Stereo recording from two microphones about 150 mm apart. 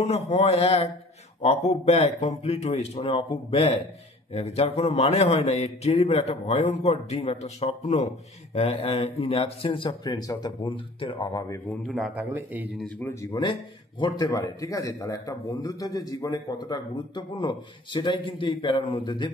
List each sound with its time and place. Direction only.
0.0 s a man's voice: 45° left (ahead or behind); by 11.6 s 25° left (ahead or behind)
11.8 s speech: centre (ahead or behind)
12.2 s a man's voice: 15° right (ahead or behind)
12.7 s speech: 5° left (ahead or behind)
13.2 s a man's voice: 25° left (ahead or behind)